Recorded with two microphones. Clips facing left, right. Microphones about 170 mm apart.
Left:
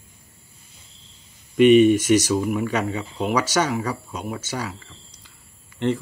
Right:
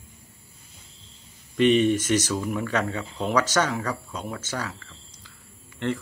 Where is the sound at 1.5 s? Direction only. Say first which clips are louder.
Left 6 dB; 15° left (ahead or behind).